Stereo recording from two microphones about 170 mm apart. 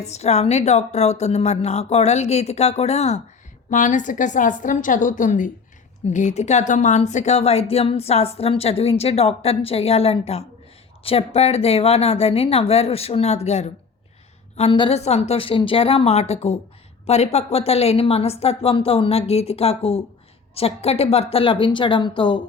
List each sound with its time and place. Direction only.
0.0 s a woman's voice: 40° left (ahead or behind)